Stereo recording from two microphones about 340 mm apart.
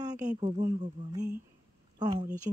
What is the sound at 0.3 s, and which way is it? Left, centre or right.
Speech, centre.